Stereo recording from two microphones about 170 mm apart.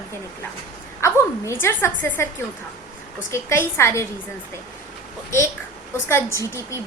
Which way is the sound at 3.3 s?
15° left (ahead or behind).